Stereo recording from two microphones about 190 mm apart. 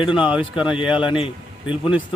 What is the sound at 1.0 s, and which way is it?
Speech, 25° left (ahead or behind).